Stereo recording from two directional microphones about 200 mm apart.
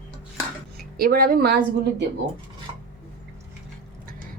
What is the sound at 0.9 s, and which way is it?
A woman's voice, 45° right (ahead or behind).